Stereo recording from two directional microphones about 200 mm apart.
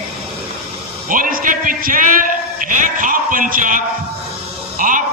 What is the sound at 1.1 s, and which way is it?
A man's voice, 45° right (ahead or behind).